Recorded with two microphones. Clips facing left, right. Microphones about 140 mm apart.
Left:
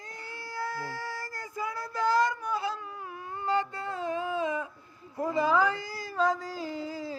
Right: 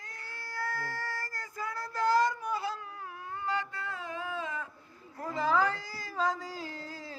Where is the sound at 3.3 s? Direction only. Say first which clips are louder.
Left 5 dB; 25° left (ahead or behind).